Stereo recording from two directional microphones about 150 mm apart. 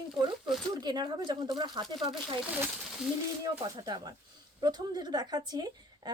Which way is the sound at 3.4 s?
30° right (ahead or behind).